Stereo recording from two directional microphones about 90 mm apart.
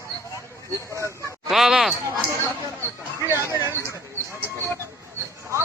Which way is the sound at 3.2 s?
35° right (ahead or behind).